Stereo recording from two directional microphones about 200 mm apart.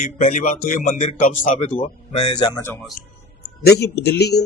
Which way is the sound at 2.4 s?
10° left (ahead or behind).